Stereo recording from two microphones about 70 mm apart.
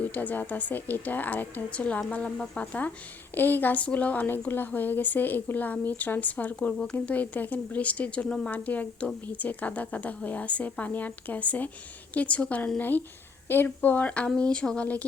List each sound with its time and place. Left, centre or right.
0.0 s speech: left